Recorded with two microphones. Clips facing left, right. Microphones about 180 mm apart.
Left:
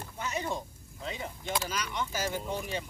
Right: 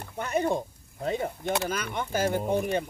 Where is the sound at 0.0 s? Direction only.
55° right (ahead or behind).